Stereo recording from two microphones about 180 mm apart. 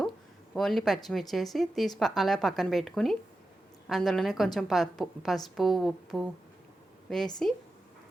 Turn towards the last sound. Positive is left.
turn(degrees=5)  # may be behind; listen again after turning